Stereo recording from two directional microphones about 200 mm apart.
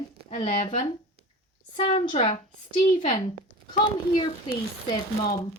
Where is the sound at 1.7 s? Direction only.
30° left (ahead or behind).